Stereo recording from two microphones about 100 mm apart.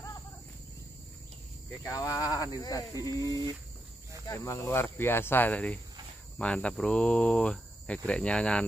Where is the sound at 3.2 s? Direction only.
40° right (ahead or behind).